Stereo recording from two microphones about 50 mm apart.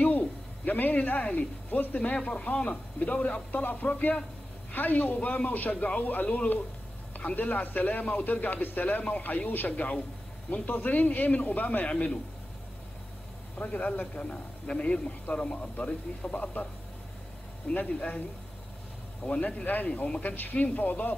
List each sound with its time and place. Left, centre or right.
0.7 s a man's voice: left
11.9 s a man's voice: left
13.6 s a man's voice: left
17.7 s a man's voice: left
19.2 s a man's voice: left